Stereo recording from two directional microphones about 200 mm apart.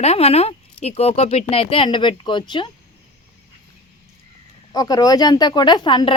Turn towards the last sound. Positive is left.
turn(degrees=25)  # may be behind; listen again after turning